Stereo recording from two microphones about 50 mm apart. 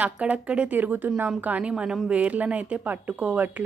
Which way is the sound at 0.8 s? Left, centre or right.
Right.